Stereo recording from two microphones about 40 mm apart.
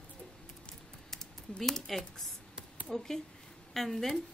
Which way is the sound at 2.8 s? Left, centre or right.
Centre.